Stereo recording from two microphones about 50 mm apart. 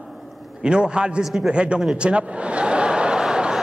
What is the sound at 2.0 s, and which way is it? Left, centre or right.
Chuckle, right.